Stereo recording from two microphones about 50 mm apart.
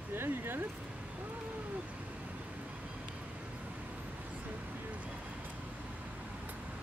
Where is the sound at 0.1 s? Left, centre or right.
Right.